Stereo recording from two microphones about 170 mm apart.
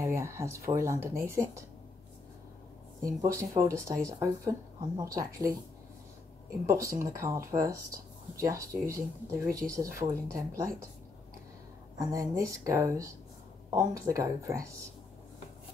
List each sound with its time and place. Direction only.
0.0 s speech: 15° right (ahead or behind)
3.2 s speech: 15° right (ahead or behind)
6.6 s speech: 15° right (ahead or behind)
12.1 s speech: 20° right (ahead or behind)